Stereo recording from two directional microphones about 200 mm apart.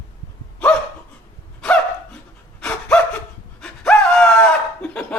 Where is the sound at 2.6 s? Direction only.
5° left (ahead or behind).